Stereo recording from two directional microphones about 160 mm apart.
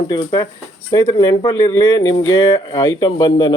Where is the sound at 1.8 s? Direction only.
30° left (ahead or behind).